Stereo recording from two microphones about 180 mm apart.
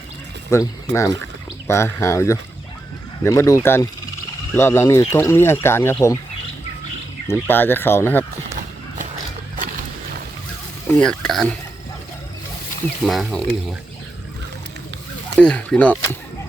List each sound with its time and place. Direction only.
0.5 s speech: 15° left (ahead or behind)
7.3 s speech: 10° left (ahead or behind)
11.0 s speech: 5° left (ahead or behind)
13.1 s speech: centre (ahead or behind)
15.4 s speech: 5° left (ahead or behind)